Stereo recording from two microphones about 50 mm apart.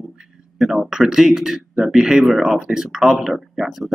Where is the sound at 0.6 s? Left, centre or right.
Centre.